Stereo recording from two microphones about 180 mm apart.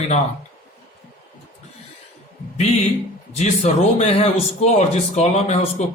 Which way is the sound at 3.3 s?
35° left (ahead or behind).